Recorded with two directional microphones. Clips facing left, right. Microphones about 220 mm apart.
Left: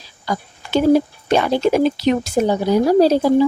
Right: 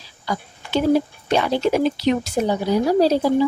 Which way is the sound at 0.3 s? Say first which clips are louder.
Left 3 dB; 45° left (ahead or behind).